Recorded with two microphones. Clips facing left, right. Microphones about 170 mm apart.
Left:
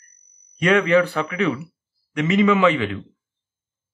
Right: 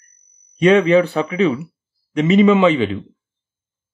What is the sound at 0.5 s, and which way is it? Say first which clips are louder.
Speech: right 5 dB; 20° right (ahead or behind).